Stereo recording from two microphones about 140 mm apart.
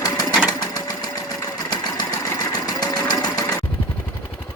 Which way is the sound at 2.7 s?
30° left (ahead or behind).